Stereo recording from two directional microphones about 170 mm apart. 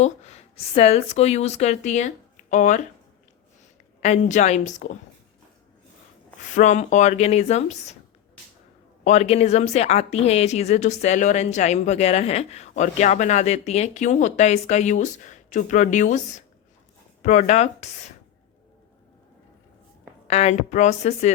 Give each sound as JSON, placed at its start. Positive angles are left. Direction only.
{"t": 0.0, "sound": "a woman's voice", "side_deg": 40}
{"t": 4.0, "sound": "speech", "side_deg": 45}
{"t": 6.4, "sound": "speech", "side_deg": 45}
{"t": 9.0, "sound": "a woman's voice", "side_deg": 40}
{"t": 20.2, "sound": "a woman's voice", "side_deg": 40}